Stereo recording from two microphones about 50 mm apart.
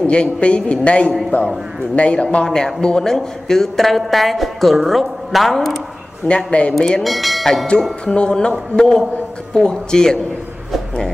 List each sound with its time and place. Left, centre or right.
0.0 s a man's voice: left
1.3 s a man's voice: left
2.0 s a man's voice: left; by 5.8 s centre
6.2 s a man's voice: left
7.0 s a woman's voice: centre
8.0 s speech: centre